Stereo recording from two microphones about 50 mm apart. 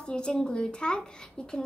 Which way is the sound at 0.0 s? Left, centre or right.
Centre.